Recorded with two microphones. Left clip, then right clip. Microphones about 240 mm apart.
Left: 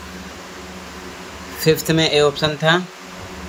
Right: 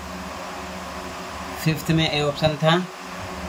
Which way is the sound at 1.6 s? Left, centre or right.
Centre.